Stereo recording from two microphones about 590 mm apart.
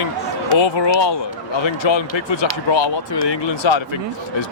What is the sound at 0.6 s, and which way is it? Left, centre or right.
Speech, left.